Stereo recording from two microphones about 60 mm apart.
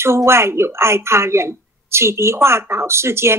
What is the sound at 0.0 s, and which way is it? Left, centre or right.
Speech, right.